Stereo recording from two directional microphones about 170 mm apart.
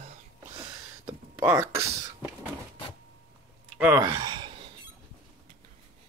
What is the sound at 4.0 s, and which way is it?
Gasp, 25° right (ahead or behind).